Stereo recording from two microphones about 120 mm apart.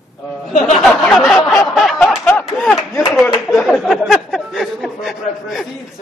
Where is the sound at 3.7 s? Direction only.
Centre (ahead or behind).